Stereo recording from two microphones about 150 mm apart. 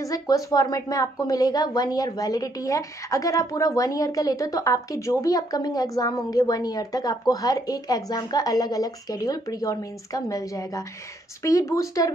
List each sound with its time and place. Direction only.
0.0 s a woman's voice: 20° left (ahead or behind)